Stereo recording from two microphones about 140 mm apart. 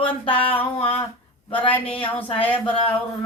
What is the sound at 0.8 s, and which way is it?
Humming, 45° left (ahead or behind).